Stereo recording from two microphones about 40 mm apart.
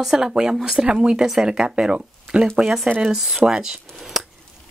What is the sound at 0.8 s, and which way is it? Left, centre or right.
Speech, right.